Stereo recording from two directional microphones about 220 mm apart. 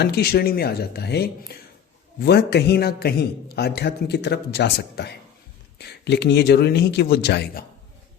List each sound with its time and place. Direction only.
0.0 s a man's voice: 45° left (ahead or behind)